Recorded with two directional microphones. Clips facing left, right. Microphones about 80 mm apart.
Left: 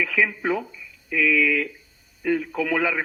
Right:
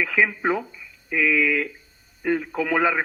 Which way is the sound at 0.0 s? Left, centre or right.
Right.